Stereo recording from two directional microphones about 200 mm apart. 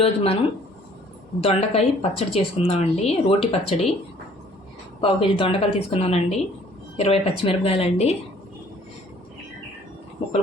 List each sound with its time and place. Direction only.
0.0 s speech: 30° left (ahead or behind)
1.4 s a woman's voice: 30° left (ahead or behind)
4.9 s a woman's voice: 25° left (ahead or behind)